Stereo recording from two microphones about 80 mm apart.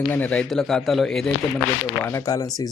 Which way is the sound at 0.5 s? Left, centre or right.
Centre.